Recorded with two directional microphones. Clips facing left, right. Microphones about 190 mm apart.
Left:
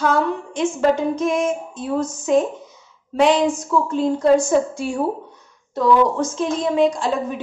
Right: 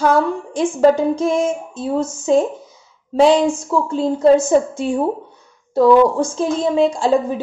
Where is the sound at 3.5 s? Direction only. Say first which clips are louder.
Right 1 dB; 30° right (ahead or behind).